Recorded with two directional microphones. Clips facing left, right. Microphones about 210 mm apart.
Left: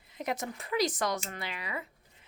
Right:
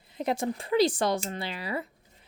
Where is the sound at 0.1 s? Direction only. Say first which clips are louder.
Right 6 dB; 30° right (ahead or behind).